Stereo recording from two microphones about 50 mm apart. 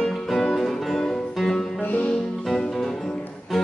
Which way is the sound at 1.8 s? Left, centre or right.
Left.